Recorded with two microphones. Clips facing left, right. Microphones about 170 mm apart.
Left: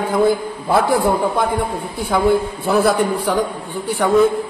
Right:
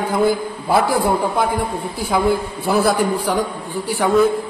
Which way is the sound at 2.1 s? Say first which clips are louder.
Left 2 dB; centre (ahead or behind).